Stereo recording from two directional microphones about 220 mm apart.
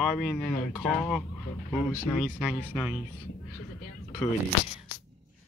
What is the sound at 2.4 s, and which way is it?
Speech, 5° right (ahead or behind).